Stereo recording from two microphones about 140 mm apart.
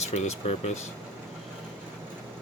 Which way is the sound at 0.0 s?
50° left (ahead or behind).